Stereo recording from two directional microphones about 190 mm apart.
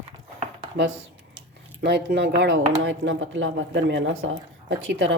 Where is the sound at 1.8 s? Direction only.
65° right (ahead or behind).